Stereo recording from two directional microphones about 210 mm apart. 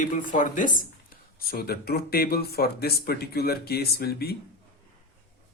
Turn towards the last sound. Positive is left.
turn(degrees=50)  # may be behind; listen again after turning